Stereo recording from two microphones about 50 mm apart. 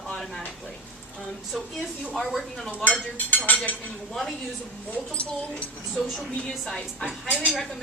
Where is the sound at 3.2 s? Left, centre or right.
Left.